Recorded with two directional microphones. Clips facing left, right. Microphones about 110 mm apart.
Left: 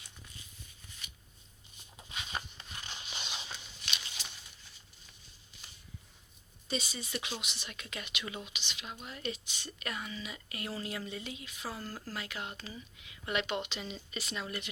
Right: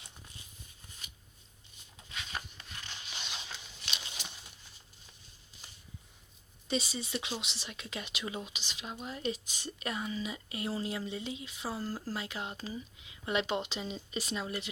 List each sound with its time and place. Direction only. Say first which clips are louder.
2.0 s a sound: left 1 dB; 10° left (ahead or behind)
6.7 s speech: right 3 dB; 30° right (ahead or behind)
11.8 s speech: right 5 dB; 10° right (ahead or behind)
12.1 s speech: right 2 dB; 25° right (ahead or behind)